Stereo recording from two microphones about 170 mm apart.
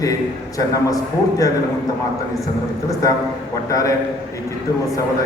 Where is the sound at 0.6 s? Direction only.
20° left (ahead or behind).